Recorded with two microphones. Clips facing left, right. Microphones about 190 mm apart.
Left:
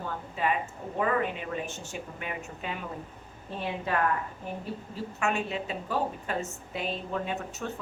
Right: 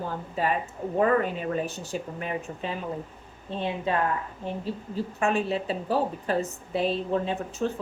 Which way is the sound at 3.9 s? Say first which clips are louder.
Right 3 dB; 25° right (ahead or behind).